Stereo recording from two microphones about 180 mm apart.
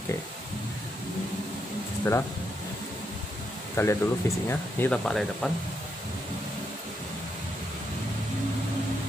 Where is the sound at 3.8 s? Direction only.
15° left (ahead or behind).